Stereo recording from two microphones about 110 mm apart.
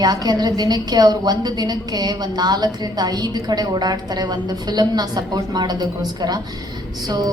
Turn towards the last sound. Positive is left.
turn(degrees=-35)  # may be behind; listen again after turning